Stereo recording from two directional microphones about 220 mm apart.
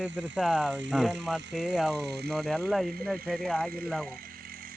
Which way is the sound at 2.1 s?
50° right (ahead or behind).